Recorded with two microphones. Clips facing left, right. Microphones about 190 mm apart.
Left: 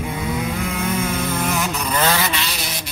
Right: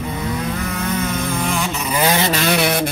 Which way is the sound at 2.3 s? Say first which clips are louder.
Right 10 dB; 55° right (ahead or behind).